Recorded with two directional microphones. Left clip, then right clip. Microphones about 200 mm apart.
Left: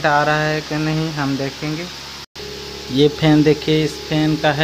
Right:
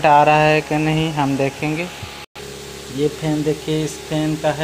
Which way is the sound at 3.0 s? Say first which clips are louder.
Left 6 dB; 30° left (ahead or behind).